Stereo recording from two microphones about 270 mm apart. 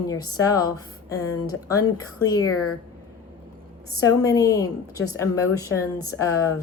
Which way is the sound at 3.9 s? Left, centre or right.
Centre.